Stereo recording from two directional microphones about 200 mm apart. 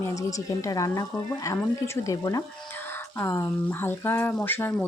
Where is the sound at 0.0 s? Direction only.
15° left (ahead or behind).